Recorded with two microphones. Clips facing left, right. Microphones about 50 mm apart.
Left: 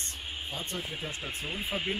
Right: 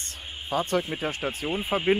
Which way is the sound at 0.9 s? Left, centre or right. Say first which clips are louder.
Right 8 dB; right.